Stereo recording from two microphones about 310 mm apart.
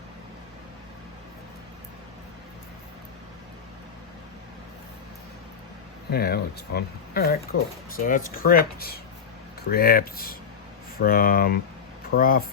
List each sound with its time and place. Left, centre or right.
6.1 s speech: left